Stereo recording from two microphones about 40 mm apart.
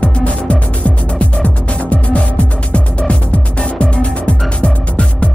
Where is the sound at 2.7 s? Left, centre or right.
Left.